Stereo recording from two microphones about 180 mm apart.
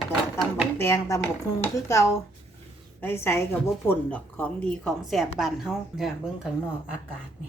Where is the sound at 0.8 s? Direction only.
15° left (ahead or behind); by 6.5 s centre (ahead or behind).